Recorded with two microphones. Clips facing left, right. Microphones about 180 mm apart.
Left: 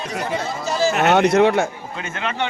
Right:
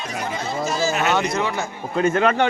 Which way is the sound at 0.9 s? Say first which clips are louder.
Left 5 dB; 65° left (ahead or behind).